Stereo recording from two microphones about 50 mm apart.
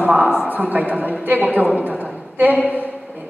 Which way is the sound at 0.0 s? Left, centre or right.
Right.